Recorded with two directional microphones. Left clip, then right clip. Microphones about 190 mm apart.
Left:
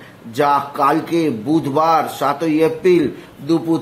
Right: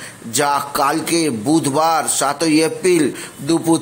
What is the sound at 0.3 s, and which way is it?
A man's voice, 20° right (ahead or behind).